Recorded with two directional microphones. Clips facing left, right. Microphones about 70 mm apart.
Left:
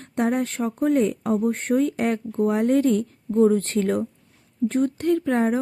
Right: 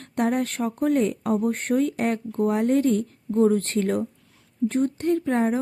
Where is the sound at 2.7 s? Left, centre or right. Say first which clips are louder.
Left 2 dB; left.